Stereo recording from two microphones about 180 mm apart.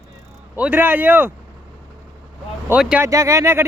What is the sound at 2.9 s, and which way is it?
Speech, 15° right (ahead or behind).